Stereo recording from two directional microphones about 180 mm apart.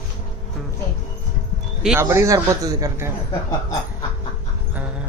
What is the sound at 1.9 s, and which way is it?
Speech, 15° right (ahead or behind).